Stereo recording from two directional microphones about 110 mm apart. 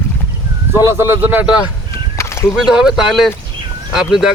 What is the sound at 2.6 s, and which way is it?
Speech, 5° right (ahead or behind).